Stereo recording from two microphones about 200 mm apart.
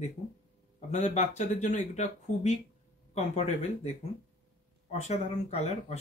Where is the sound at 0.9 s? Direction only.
35° left (ahead or behind).